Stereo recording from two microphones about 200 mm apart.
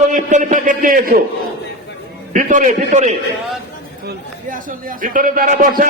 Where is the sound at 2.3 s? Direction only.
40° right (ahead or behind).